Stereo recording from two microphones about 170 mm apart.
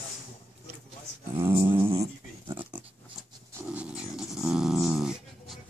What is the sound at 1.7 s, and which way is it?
Dog, 30° right (ahead or behind).